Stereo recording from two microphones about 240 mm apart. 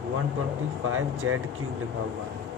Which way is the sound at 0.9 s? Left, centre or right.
Right.